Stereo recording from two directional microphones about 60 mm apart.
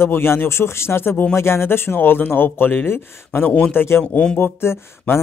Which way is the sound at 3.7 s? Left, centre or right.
Left.